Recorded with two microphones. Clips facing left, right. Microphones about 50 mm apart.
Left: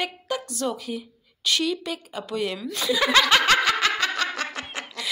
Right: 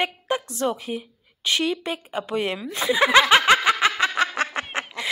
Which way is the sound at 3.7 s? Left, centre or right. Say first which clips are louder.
Right 3 dB; right.